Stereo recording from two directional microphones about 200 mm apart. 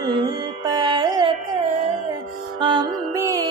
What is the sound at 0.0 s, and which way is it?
Music, 25° right (ahead or behind).